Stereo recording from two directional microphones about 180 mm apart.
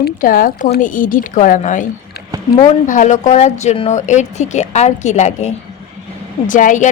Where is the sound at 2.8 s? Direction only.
45° left (ahead or behind).